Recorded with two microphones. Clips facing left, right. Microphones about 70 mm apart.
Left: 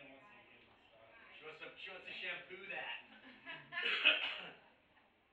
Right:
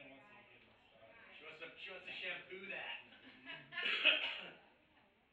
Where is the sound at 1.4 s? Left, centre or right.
Centre.